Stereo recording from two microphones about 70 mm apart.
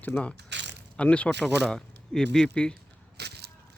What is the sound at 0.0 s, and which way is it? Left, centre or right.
Speech, left.